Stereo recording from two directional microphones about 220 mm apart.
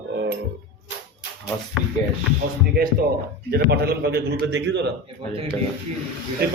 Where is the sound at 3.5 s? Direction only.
45° right (ahead or behind).